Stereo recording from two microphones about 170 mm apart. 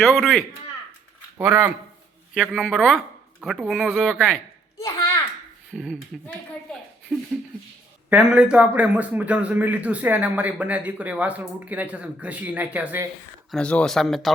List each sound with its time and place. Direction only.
0.0 s speech: centre (ahead or behind)
1.4 s a man's voice: 15° right (ahead or behind)
2.3 s speech: centre (ahead or behind)
4.8 s a sound: 15° left (ahead or behind)
5.7 s speech: centre (ahead or behind)
7.1 s a man's voice: 5° right (ahead or behind)
13.5 s speech: 5° left (ahead or behind)